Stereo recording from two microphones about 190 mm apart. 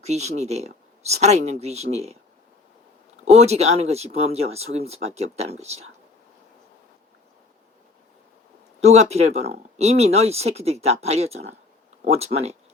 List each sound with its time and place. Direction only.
0.0 s speech: 35° right (ahead or behind)
3.2 s speech: 35° right (ahead or behind)
8.8 s speech: 35° right (ahead or behind)